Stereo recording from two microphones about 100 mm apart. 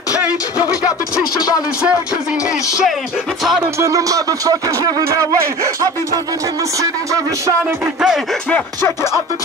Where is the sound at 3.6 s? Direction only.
30° right (ahead or behind).